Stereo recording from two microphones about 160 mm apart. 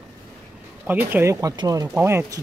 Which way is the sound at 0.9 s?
10° right (ahead or behind).